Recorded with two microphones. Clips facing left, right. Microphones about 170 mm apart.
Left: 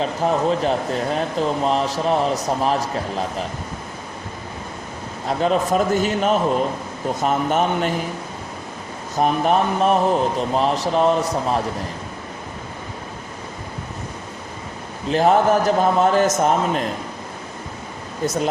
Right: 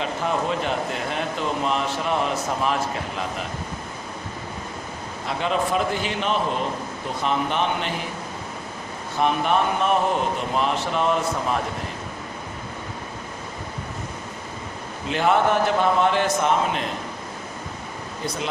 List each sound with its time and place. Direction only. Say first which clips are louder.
0.0 s speech: left 5 dB; 35° left (ahead or behind)
5.2 s a man's voice: left 5 dB; 40° left (ahead or behind)
9.1 s speech: left 3 dB; 40° left (ahead or behind)
15.1 s speech: left 4 dB; 40° left (ahead or behind)